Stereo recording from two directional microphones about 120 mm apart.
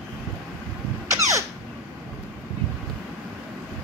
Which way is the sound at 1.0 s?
25° right (ahead or behind).